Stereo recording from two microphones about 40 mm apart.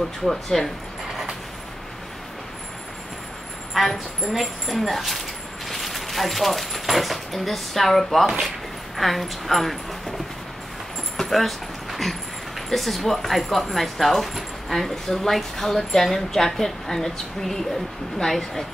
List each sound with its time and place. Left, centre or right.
0.3 s speech: centre
3.7 s speech: centre
11.1 s speech: centre